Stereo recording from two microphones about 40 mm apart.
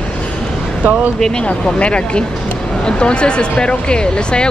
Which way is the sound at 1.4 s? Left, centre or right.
Left.